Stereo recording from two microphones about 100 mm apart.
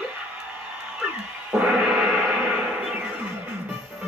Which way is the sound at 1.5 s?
10° right (ahead or behind).